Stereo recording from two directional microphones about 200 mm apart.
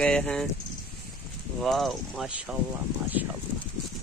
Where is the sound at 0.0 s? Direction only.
5° left (ahead or behind).